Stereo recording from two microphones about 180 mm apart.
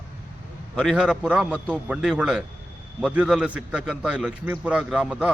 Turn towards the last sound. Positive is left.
turn(degrees=-5)  # may be behind; listen again after turning